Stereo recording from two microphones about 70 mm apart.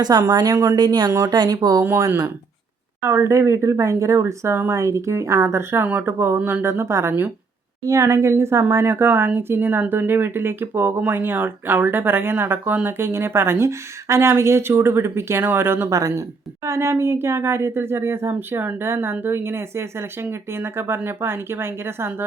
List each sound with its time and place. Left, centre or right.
0.2 s speech: right
0.8 s speech: right
2.0 s speech: right
3.0 s speech: right
5.8 s speech: right
15.9 s speech: right